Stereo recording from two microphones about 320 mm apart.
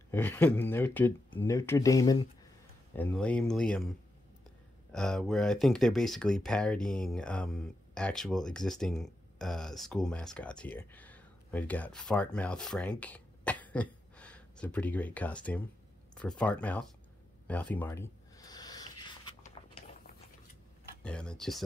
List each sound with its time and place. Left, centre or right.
0.1 s speech: centre
4.9 s speech: centre
12.9 s a sound: centre
16.2 s speech: centre
17.5 s a sound: centre
21.0 s speech: centre